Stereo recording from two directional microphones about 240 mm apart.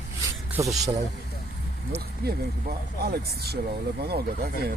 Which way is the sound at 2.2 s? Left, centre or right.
Right.